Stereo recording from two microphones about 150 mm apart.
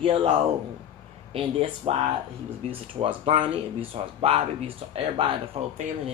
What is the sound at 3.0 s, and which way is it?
Speech, 40° right (ahead or behind).